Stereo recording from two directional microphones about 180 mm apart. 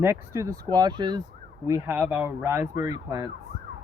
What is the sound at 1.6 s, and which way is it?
Speech, 15° right (ahead or behind).